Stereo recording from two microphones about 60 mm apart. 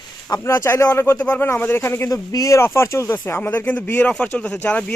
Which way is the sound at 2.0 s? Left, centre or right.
Left.